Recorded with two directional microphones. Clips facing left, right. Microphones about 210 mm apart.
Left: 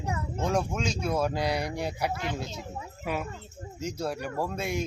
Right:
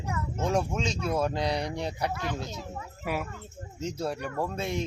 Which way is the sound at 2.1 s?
20° left (ahead or behind).